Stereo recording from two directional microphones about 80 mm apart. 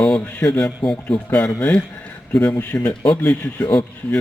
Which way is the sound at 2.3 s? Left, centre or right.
Left.